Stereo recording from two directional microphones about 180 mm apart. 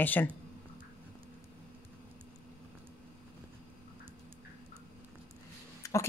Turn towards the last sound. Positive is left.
turn(degrees=15)  # may be behind; listen again after turning